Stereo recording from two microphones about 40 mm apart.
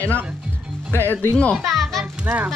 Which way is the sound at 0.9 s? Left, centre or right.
Left.